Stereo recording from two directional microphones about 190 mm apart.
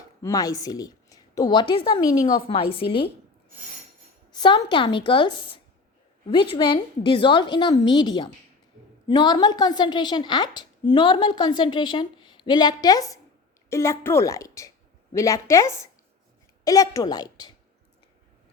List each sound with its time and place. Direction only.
0.2 s a woman's voice: 20° left (ahead or behind)
4.3 s a woman's voice: 25° left (ahead or behind)